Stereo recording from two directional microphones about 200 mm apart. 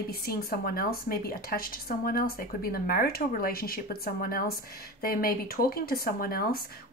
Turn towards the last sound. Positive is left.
turn(degrees=50)  # may be behind; listen again after turning